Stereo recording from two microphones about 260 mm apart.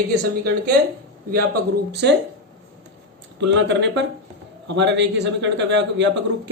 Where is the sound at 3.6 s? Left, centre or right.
Right.